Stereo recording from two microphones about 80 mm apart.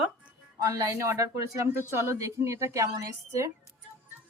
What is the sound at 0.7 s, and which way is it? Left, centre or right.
A woman's voice, right.